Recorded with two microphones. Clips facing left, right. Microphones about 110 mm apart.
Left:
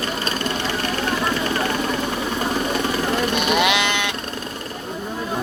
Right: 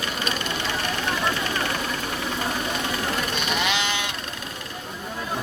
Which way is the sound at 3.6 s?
65° left (ahead or behind).